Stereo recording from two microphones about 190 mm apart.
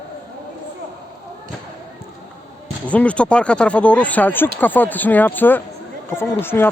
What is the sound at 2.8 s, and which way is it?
Speech, 5° left (ahead or behind).